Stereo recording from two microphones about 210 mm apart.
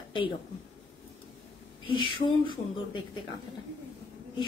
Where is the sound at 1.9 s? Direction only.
25° left (ahead or behind).